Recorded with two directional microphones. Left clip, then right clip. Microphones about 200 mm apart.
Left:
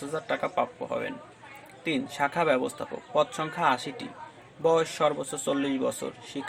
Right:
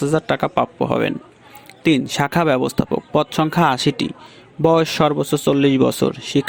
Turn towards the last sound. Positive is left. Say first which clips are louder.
# right 16 dB
turn(degrees=-45)  # may be behind; listen again after turning